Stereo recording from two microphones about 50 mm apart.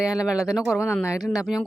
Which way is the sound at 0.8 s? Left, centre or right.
Left.